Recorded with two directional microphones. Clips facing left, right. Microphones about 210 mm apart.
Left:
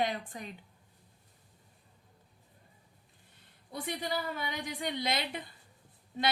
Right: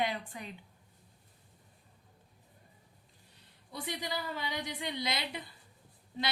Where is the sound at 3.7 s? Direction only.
50° left (ahead or behind).